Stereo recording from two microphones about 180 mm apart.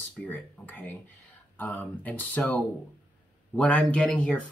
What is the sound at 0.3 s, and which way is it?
Speech, 10° left (ahead or behind).